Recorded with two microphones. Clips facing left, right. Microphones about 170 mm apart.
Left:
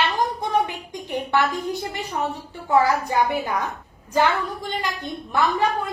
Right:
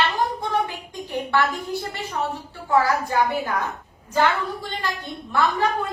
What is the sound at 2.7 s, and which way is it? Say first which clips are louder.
A woman's voice: left 1 dB; 20° left (ahead or behind).